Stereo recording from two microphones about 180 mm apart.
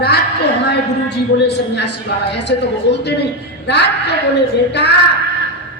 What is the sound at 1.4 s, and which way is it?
A man's voice, 70° left (ahead or behind).